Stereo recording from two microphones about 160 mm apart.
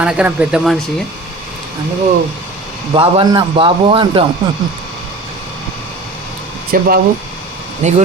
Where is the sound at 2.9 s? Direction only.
30° right (ahead or behind).